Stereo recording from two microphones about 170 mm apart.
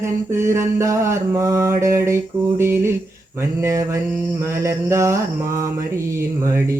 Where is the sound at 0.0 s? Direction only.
15° right (ahead or behind).